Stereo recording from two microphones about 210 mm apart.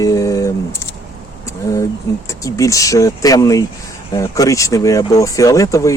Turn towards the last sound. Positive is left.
turn(degrees=15)  # may be behind; listen again after turning